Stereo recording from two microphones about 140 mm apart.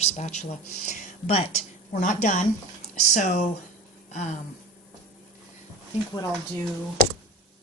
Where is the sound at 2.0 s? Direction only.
65° left (ahead or behind).